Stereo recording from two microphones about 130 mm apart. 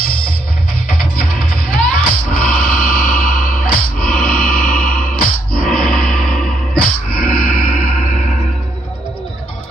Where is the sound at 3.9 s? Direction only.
5° left (ahead or behind).